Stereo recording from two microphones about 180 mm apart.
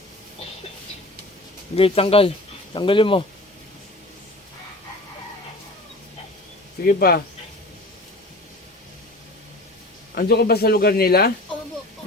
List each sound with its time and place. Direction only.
1.7 s speech: 30° left (ahead or behind)
6.8 s speech: 55° left (ahead or behind)
10.2 s speech: 55° left (ahead or behind)